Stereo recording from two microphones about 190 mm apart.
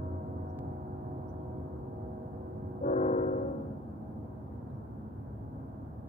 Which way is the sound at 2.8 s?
40° left (ahead or behind).